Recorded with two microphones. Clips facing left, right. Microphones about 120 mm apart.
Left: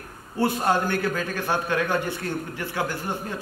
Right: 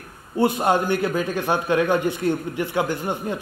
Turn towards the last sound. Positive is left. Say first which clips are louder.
# right 5 dB
turn(degrees=-20)  # may be behind; listen again after turning